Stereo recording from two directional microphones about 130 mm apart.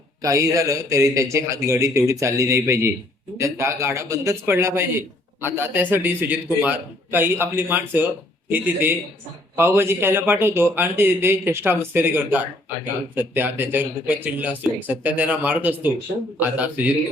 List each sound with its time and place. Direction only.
0.2 s a man's voice: 25° right (ahead or behind)